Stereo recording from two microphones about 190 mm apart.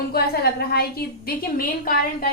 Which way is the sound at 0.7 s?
55° left (ahead or behind).